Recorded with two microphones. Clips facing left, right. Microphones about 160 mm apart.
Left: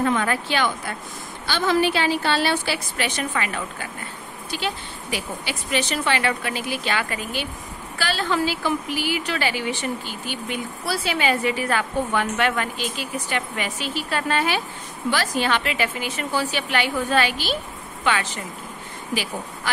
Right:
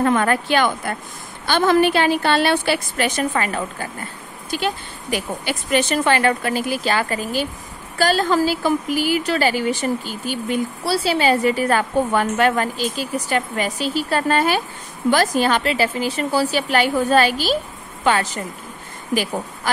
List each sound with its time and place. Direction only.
0.0 s a woman's voice: 50° right (ahead or behind)